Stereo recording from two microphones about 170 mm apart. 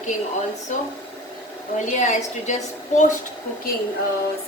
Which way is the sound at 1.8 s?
45° left (ahead or behind).